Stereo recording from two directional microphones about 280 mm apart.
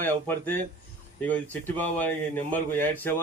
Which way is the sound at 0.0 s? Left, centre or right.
Centre.